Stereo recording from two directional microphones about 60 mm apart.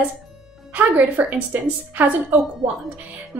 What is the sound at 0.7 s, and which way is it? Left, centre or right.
A woman's voice, right.